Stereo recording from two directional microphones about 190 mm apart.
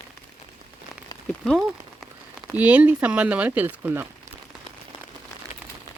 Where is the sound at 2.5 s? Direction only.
10° right (ahead or behind).